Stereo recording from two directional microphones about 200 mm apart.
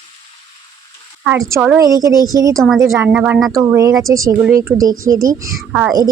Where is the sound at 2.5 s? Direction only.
Centre (ahead or behind); by 5.5 s 15° right (ahead or behind).